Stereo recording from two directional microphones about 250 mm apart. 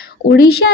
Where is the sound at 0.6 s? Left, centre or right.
Left.